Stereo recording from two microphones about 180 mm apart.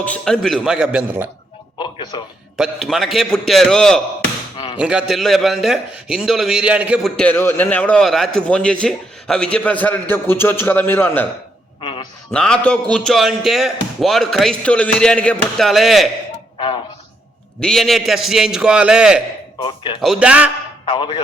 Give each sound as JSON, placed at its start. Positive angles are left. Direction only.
{"t": 0.0, "sound": "a man's voice", "side_deg": 5}
{"t": 1.8, "sound": "a man's voice", "side_deg": 25}
{"t": 2.6, "sound": "a man's voice", "side_deg": 0}
{"t": 4.5, "sound": "music", "side_deg": 25}
{"t": 4.8, "sound": "a man's voice", "side_deg": -5}
{"t": 7.2, "sound": "a man's voice", "side_deg": 10}
{"t": 11.8, "sound": "a sound", "side_deg": 30}
{"t": 12.3, "sound": "a man's voice", "side_deg": 5}
{"t": 16.6, "sound": "speech", "side_deg": 30}
{"t": 17.6, "sound": "a man's voice", "side_deg": 0}
{"t": 19.5, "sound": "speech", "side_deg": 30}
{"t": 20.0, "sound": "a man's voice", "side_deg": -5}
{"t": 20.8, "sound": "a man's voice", "side_deg": 30}